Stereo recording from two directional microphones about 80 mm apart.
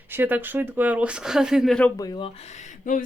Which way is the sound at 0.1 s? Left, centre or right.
Right.